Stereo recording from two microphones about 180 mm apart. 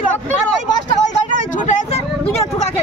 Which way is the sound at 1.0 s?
45° left (ahead or behind).